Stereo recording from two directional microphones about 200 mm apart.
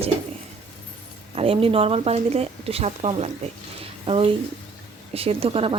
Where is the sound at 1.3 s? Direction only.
30° right (ahead or behind).